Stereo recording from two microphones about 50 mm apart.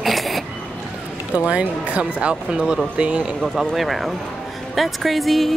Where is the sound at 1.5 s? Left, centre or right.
Right.